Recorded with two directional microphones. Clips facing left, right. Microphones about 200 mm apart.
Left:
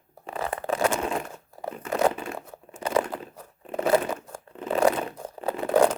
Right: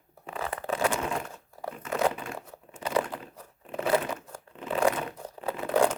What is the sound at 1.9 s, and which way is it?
Tearing, 45° left (ahead or behind).